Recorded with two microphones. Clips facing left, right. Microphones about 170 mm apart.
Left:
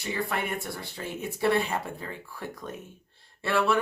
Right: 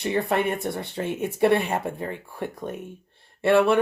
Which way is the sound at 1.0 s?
40° right (ahead or behind).